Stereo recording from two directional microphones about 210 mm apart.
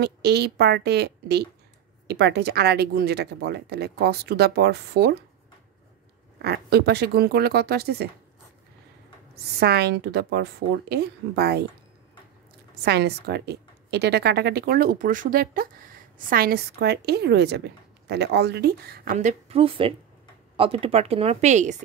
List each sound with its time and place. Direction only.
0.0 s speech: 50° right (ahead or behind)
6.4 s speech: 50° right (ahead or behind)
9.3 s speech: 50° right (ahead or behind)
12.8 s speech: 50° right (ahead or behind)
19.1 s speech: 30° right (ahead or behind)